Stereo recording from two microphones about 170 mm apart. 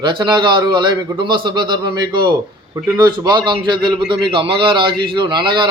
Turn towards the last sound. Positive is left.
turn(degrees=-25)  # may be behind; listen again after turning